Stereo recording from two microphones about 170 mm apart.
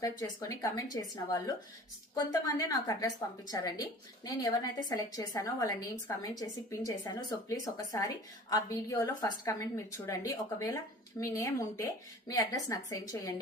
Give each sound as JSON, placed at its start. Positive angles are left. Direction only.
{"t": 0.0, "sound": "a woman's voice", "side_deg": 20}